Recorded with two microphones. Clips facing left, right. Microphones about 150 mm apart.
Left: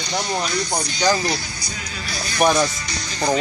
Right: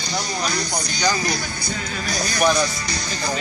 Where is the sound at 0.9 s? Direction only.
45° right (ahead or behind).